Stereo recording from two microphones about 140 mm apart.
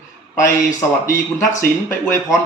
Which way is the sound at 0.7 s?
20° left (ahead or behind).